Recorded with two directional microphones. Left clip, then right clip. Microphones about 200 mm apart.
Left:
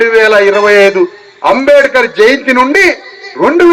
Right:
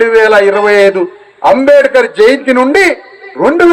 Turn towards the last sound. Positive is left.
turn(degrees=-40)  # may be behind; listen again after turning